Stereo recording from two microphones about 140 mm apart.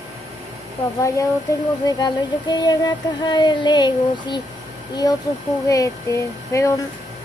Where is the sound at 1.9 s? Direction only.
30° left (ahead or behind).